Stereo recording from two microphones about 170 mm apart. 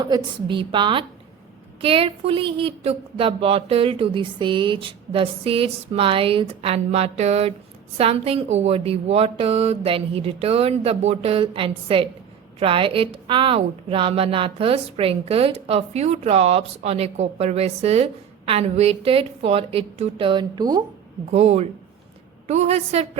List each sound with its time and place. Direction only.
0.0 s a woman's voice: 25° right (ahead or behind)
21.3 s a woman's voice: 40° right (ahead or behind)